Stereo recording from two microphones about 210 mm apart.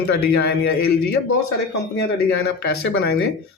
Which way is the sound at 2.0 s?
50° left (ahead or behind).